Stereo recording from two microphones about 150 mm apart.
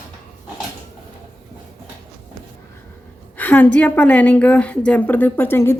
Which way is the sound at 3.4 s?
10° left (ahead or behind).